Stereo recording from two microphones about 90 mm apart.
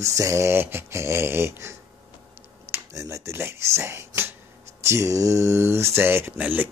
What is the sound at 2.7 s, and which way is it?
Speech, 35° right (ahead or behind).